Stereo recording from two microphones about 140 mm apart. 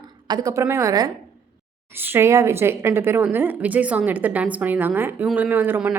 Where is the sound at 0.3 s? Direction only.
25° right (ahead or behind).